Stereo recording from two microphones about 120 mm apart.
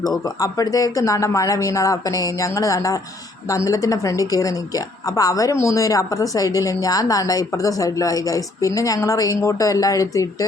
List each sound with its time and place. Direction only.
0.3 s a woman's voice: 30° left (ahead or behind)